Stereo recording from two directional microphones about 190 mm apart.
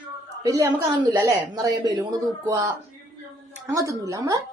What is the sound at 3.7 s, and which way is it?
Speech, 15° right (ahead or behind).